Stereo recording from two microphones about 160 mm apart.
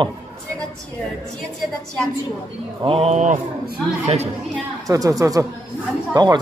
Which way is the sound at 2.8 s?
35° right (ahead or behind).